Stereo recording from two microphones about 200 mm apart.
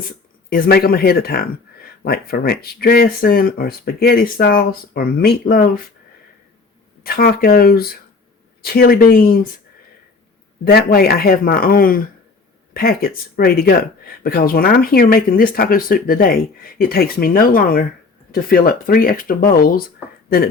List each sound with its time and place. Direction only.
0.5 s speech: 50° left (ahead or behind)
7.0 s speech: 50° left (ahead or behind)
10.6 s speech: 50° left (ahead or behind)